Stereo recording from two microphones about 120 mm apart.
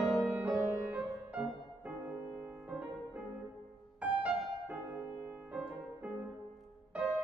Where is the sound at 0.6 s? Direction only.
25° right (ahead or behind).